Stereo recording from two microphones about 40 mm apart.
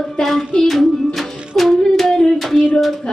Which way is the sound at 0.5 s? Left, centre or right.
Centre.